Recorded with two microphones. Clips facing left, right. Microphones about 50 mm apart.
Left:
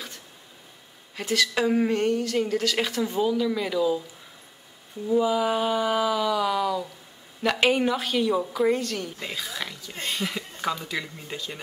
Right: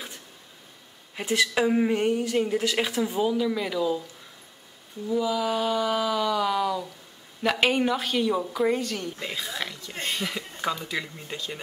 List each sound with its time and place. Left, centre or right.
1.1 s speech: centre
1.5 s speech: centre
5.0 s a woman's voice: centre
9.9 s speech: right
10.2 s a woman's voice: centre